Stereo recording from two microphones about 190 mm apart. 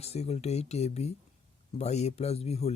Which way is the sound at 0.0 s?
35° left (ahead or behind).